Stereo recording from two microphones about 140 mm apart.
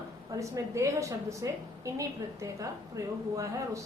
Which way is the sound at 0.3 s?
20° right (ahead or behind).